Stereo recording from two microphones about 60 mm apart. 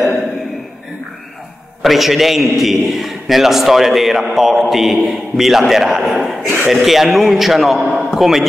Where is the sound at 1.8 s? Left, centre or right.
Centre.